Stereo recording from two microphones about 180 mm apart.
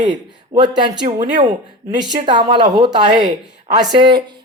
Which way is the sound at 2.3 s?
25° right (ahead or behind).